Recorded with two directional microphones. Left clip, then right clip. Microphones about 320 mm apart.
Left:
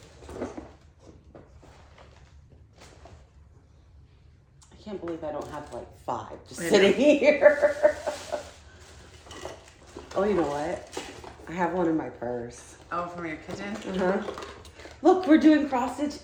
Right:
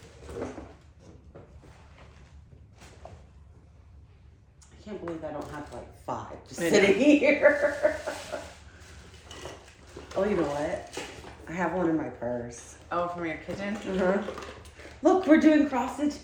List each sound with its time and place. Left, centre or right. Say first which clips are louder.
4.9 s a sound: left 2 dB; centre
6.1 s speech: left 2 dB; centre
9.3 s dishes: left 2 dB; left
10.2 s speech: left 2 dB; centre
12.9 s a man's voice: right 2 dB; centre
13.9 s speech: even; centre